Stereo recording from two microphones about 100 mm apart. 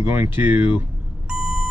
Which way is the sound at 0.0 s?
20° right (ahead or behind).